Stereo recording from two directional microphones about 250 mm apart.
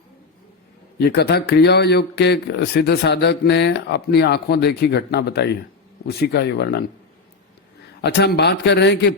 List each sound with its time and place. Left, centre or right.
0.9 s speech: left
8.0 s speech: left